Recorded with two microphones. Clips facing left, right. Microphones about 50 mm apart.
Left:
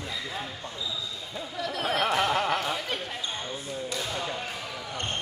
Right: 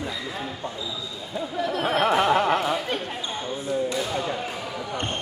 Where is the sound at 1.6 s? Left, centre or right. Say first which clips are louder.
Right 5 dB; right.